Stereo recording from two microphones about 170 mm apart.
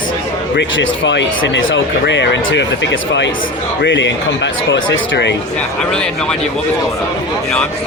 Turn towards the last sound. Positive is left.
turn(degrees=5)  # may be behind; listen again after turning